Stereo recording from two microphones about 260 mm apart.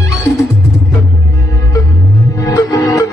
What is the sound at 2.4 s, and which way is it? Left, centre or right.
Music, centre.